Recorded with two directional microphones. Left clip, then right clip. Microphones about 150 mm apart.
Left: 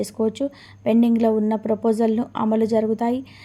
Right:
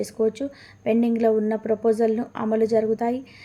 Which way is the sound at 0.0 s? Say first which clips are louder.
Left 1 dB; 25° left (ahead or behind).